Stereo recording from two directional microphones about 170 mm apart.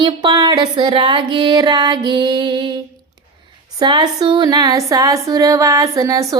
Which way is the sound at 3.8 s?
25° right (ahead or behind).